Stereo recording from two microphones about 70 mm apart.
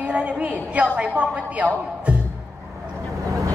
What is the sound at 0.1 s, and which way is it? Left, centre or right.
A woman's voice, centre.